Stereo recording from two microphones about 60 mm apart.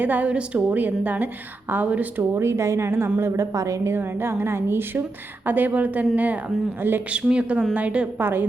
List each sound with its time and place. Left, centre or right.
0.0 s a woman's voice: right
2.3 s a woman's voice: right
3.9 s a woman's voice: right
8.2 s a woman's voice: right